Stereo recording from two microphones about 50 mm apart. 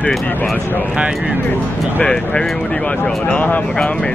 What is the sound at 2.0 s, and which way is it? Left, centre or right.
Speech, left.